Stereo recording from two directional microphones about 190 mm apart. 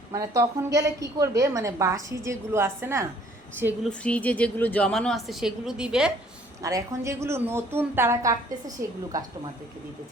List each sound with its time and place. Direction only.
0.1 s a woman's voice: 20° right (ahead or behind)
3.8 s a woman's voice: 5° left (ahead or behind)
6.6 s a woman's voice: 15° right (ahead or behind)